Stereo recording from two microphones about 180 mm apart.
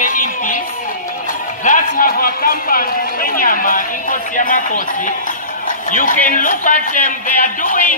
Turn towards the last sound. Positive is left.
turn(degrees=50)  # may be behind; listen again after turning